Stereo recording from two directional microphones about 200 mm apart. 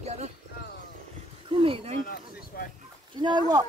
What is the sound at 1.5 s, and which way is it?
Speech, 25° right (ahead or behind).